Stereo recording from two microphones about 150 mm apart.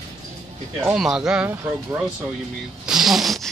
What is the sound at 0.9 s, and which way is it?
Speech, 5° right (ahead or behind).